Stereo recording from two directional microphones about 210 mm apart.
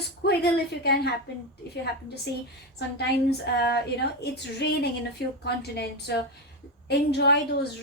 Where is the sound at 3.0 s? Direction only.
50° left (ahead or behind).